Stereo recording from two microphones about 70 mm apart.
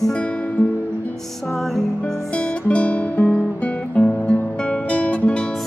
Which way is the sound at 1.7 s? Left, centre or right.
Centre.